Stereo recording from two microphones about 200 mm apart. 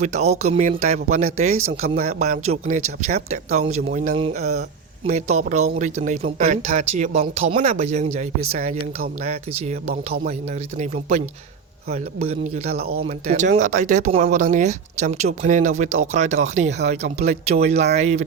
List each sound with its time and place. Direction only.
0.0 s speech: 35° right (ahead or behind)